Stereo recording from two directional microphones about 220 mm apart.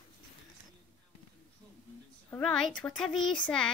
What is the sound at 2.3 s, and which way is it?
Speech, 5° left (ahead or behind).